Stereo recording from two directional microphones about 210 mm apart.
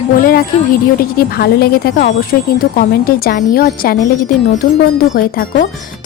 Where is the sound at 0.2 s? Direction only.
45° left (ahead or behind).